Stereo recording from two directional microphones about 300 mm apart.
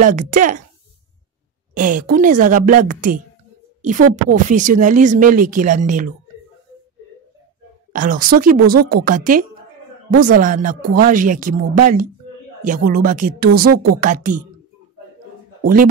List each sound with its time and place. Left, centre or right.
0.0 s speech: right
1.7 s speech: right
7.9 s speech: right